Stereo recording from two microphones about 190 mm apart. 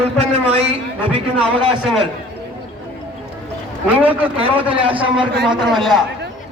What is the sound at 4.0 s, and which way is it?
Speech, 10° right (ahead or behind).